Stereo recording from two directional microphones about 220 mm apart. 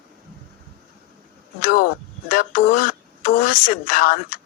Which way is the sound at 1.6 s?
40° left (ahead or behind).